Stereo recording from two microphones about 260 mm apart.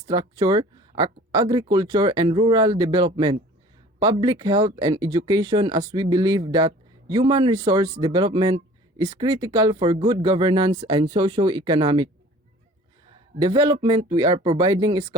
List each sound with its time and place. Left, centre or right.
0.1 s speech: centre
13.4 s speech: centre